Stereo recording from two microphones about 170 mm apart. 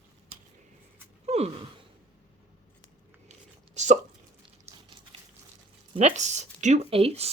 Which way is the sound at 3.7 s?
45° right (ahead or behind).